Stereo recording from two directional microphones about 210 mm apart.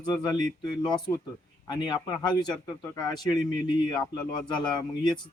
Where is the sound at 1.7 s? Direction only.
20° left (ahead or behind).